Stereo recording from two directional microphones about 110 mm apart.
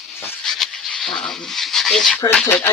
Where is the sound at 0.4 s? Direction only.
5° left (ahead or behind).